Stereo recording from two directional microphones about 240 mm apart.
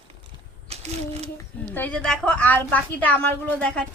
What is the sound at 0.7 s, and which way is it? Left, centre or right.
Speech, right.